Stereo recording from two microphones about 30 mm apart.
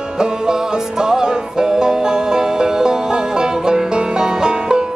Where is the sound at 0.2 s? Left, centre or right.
Right.